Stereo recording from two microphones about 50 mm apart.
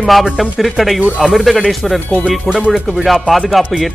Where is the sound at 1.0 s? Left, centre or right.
Centre.